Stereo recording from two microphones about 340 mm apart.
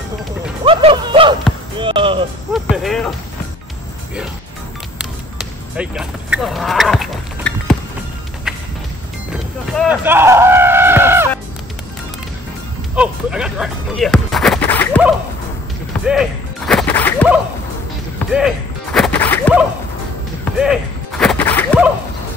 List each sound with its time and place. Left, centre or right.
0.7 s speech: centre
1.8 s music: centre
2.5 s speech: centre
4.9 s basketball bounce: centre
8.5 s music: centre
9.8 s speech: centre
12.9 s speech: centre
16.1 s whip: centre